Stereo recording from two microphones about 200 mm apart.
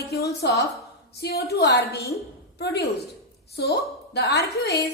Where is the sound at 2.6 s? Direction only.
55° left (ahead or behind).